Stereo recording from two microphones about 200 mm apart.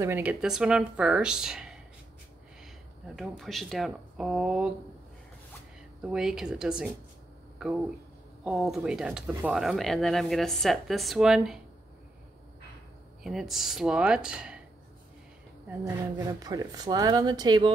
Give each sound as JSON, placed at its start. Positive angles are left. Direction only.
{"t": 0.0, "sound": "speech", "side_deg": -10}
{"t": 3.2, "sound": "speech", "side_deg": 0}
{"t": 6.0, "sound": "speech", "side_deg": -5}
{"t": 13.2, "sound": "speech", "side_deg": 0}
{"t": 15.8, "sound": "speech", "side_deg": -15}